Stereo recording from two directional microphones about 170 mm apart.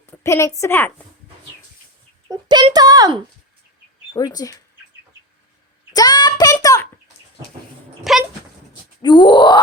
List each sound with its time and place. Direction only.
0.0 s a woman's voice: 15° left (ahead or behind)
2.3 s a child's voice: 25° right (ahead or behind)
4.1 s grunt: 20° left (ahead or behind)
5.9 s a sound: 25° left (ahead or behind)
8.1 s dog: centre (ahead or behind)
9.0 s grunt: 30° left (ahead or behind)